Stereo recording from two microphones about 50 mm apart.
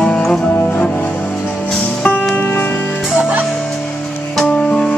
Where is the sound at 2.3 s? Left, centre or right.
Left.